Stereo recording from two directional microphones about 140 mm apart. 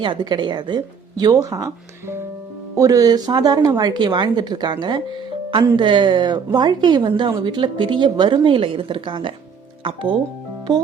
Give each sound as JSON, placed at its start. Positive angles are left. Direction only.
{"t": 0.0, "sound": "speech", "side_deg": -35}